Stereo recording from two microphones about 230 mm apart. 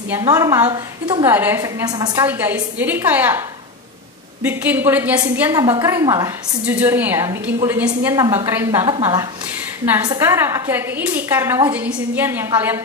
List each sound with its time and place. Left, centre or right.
0.1 s a woman's voice: centre
1.3 s a woman's voice: centre
8.8 s a woman's voice: right